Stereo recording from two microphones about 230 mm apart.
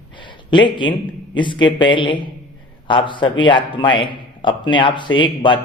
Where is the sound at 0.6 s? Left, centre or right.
Left.